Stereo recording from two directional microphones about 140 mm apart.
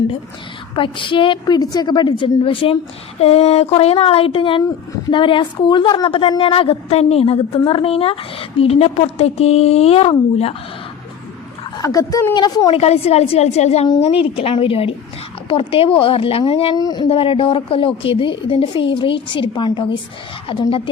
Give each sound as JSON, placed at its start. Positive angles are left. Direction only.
{"t": 0.8, "sound": "a woman's voice", "side_deg": 35}
{"t": 11.8, "sound": "a woman's voice", "side_deg": 25}
{"t": 12.7, "sound": "a woman's voice", "side_deg": 45}
{"t": 16.7, "sound": "a woman's voice", "side_deg": 30}
{"t": 17.1, "sound": "a woman's voice", "side_deg": 40}